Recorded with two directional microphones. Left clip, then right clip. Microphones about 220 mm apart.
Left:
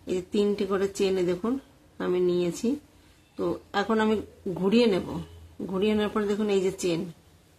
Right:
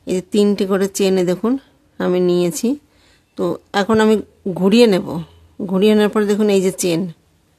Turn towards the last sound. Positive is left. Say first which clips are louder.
# right 9 dB
turn(degrees=-50)  # may be behind; listen again after turning